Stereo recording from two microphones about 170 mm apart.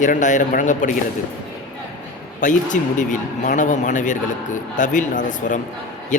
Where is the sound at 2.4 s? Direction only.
50° left (ahead or behind).